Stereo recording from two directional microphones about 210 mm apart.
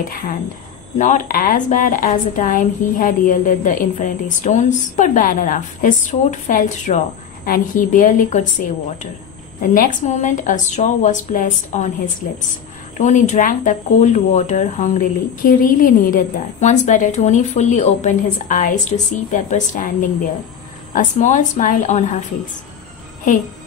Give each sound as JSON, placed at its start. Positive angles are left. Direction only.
{"t": 0.1, "sound": "speech", "side_deg": 40}
{"t": 9.6, "sound": "speech", "side_deg": 35}
{"t": 12.9, "sound": "speech", "side_deg": 35}